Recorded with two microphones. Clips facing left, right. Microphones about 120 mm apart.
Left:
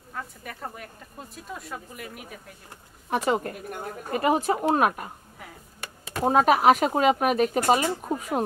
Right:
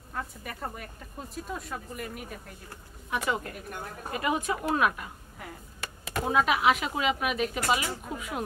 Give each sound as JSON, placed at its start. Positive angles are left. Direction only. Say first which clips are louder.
{"t": 0.1, "sound": "speech", "louder": "even", "side_deg": 0}
{"t": 3.1, "sound": "speech", "louder": "left 6 dB", "side_deg": 35}
{"t": 6.2, "sound": "speech", "louder": "left 6 dB", "side_deg": 45}